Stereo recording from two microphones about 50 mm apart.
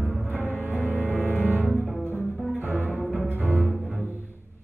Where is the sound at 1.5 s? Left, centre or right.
Right.